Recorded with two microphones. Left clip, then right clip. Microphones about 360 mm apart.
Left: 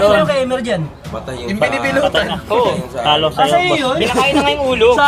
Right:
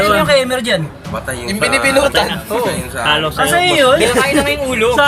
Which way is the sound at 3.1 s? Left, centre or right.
Left.